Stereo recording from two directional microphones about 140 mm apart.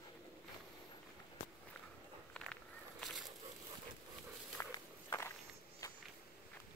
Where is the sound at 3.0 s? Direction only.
Centre (ahead or behind).